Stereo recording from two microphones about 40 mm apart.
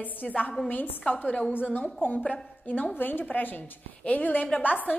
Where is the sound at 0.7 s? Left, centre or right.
Left.